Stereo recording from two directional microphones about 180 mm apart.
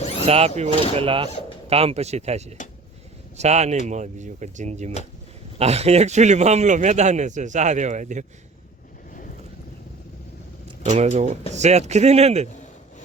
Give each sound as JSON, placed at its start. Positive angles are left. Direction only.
{"t": 0.0, "sound": "a sound", "side_deg": 35}
{"t": 0.3, "sound": "a man's voice", "side_deg": -35}
{"t": 10.8, "sound": "a man's voice", "side_deg": -40}